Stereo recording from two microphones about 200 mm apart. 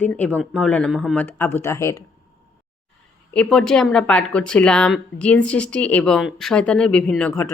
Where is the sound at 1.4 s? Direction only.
10° left (ahead or behind).